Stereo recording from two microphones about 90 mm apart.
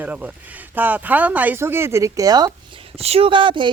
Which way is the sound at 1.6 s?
30° right (ahead or behind).